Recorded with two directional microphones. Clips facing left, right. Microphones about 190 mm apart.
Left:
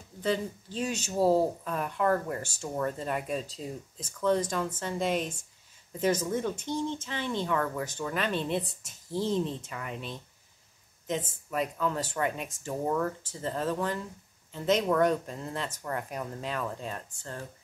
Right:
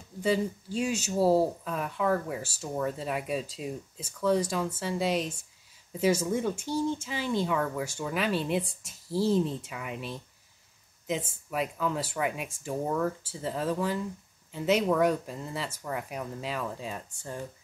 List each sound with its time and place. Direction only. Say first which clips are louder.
0.2 s speech: right 3 dB; 10° right (ahead or behind)